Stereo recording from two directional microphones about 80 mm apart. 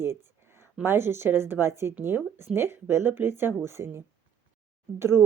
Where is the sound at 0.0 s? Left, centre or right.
Right.